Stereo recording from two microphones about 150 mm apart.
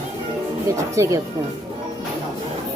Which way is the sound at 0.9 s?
20° right (ahead or behind).